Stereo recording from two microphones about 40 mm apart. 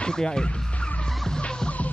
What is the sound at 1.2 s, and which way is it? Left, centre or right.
Music, left.